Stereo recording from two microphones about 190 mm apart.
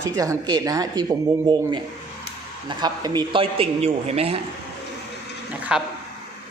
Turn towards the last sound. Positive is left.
turn(degrees=-5)  # may be behind; listen again after turning